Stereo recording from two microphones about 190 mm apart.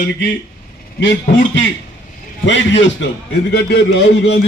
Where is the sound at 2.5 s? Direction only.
70° left (ahead or behind).